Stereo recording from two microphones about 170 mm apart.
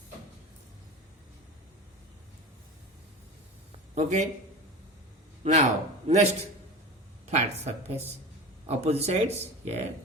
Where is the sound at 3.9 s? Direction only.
45° right (ahead or behind).